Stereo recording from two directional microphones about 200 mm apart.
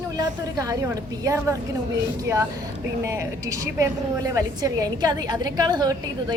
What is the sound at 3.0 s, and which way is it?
Speech, 15° right (ahead or behind).